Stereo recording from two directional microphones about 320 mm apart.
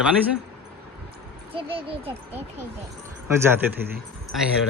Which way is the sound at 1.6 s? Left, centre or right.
Centre.